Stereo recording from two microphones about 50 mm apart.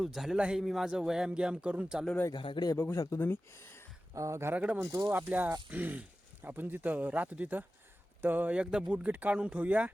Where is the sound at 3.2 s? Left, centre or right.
Left.